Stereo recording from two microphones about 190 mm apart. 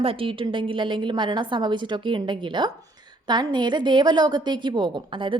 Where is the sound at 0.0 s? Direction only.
30° right (ahead or behind).